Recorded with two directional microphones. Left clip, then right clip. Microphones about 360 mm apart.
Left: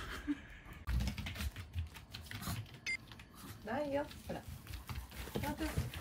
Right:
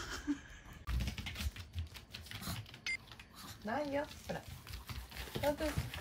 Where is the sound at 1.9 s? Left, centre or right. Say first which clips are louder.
Right 1 dB; centre.